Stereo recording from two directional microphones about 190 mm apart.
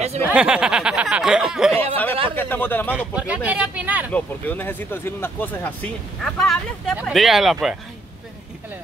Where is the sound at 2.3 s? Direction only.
10° left (ahead or behind).